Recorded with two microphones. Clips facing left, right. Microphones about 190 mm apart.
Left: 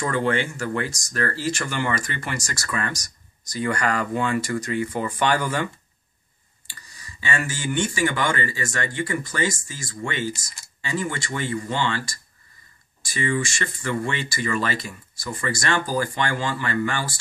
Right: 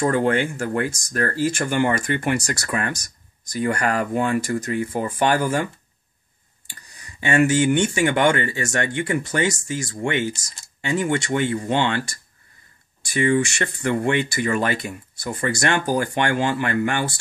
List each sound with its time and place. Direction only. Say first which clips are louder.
0.0 s speech: right 4 dB; 45° right (ahead or behind)
6.7 s speech: right 1 dB; 60° right (ahead or behind)
13.0 s speech: right 6 dB; 60° right (ahead or behind)